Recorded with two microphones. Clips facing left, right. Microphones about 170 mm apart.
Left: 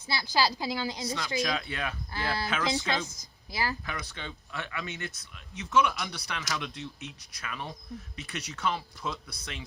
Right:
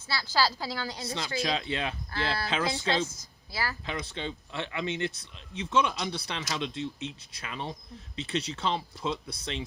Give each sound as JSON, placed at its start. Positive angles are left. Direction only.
{"t": 0.1, "sound": "a woman's voice", "side_deg": 15}
{"t": 1.0, "sound": "speech", "side_deg": -25}
{"t": 2.1, "sound": "a woman's voice", "side_deg": 15}
{"t": 2.5, "sound": "speech", "side_deg": -30}
{"t": 3.2, "sound": "a woman's voice", "side_deg": 20}
{"t": 3.8, "sound": "speech", "side_deg": -25}